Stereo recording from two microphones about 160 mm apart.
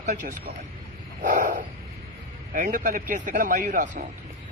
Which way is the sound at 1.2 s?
55° right (ahead or behind).